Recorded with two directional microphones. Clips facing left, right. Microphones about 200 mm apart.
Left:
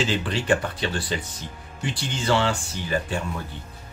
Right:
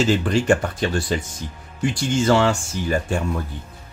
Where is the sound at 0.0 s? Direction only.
45° right (ahead or behind).